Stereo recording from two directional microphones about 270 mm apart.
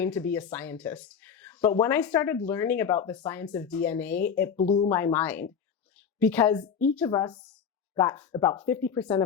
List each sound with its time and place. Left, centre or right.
0.0 s speech: centre
4.5 s speech: left
4.9 s speech: centre